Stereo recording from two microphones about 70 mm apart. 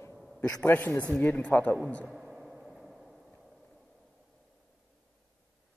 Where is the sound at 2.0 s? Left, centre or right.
Centre.